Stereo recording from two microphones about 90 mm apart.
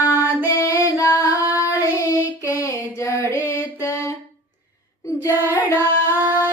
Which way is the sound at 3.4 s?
30° left (ahead or behind).